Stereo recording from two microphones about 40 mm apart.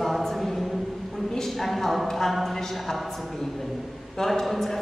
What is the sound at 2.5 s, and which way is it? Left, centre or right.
A man's voice, centre.